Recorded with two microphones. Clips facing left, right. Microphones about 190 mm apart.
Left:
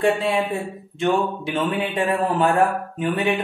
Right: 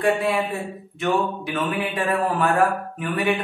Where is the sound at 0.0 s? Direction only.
25° left (ahead or behind).